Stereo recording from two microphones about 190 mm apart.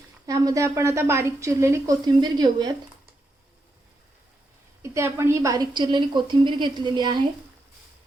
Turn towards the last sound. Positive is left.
turn(degrees=-25)  # may be behind; listen again after turning